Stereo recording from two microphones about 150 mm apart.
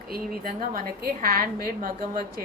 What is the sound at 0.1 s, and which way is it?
Speech, 70° right (ahead or behind).